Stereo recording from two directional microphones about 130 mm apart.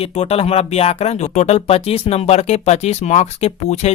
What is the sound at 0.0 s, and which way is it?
Speech, 50° left (ahead or behind).